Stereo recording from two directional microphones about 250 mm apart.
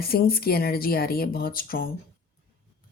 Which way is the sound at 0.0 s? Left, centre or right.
Left.